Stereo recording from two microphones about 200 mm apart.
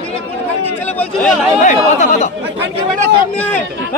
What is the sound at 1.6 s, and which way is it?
Speech, 35° left (ahead or behind).